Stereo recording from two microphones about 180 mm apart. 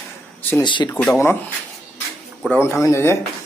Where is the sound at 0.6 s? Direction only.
25° left (ahead or behind).